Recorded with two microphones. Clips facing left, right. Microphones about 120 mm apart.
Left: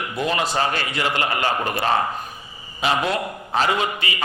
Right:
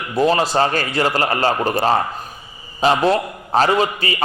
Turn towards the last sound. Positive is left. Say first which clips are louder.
# right 5 dB
turn(degrees=-35)  # may be behind; listen again after turning